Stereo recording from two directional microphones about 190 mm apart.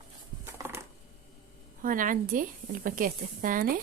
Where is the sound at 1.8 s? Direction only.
45° right (ahead or behind).